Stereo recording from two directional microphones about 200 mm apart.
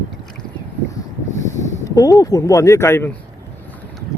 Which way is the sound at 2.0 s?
15° left (ahead or behind).